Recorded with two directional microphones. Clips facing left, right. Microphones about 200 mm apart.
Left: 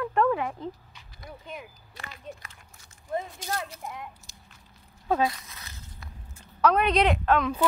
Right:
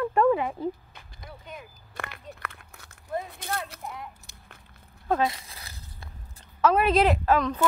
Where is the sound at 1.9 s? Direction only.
60° right (ahead or behind).